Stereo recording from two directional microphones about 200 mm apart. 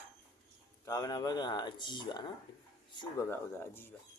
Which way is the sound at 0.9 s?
20° left (ahead or behind).